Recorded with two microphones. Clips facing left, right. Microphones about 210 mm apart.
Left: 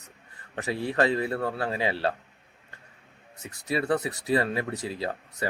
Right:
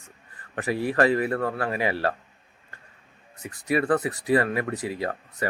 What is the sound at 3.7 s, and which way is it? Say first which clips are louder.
Speech: right 3 dB; 25° left (ahead or behind).